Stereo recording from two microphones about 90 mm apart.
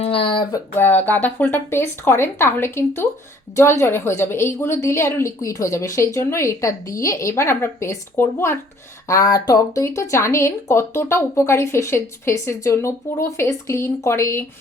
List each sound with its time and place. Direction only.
0.1 s a sound: 85° left
0.8 s speech: 20° left (ahead or behind)
9.0 s speech: 40° left (ahead or behind)